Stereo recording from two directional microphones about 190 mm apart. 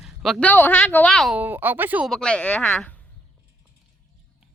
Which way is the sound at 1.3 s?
10° right (ahead or behind).